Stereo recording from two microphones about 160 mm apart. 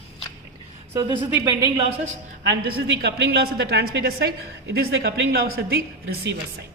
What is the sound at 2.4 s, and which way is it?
A woman's voice, 90° right.